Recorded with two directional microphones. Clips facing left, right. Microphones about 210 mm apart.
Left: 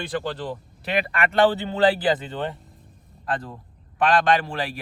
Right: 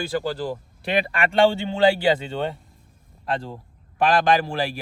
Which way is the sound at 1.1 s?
25° right (ahead or behind).